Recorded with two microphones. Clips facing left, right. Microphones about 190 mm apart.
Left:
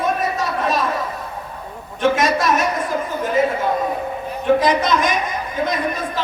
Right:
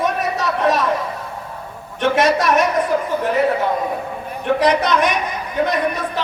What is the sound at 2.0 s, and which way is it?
Speech, 65° right (ahead or behind).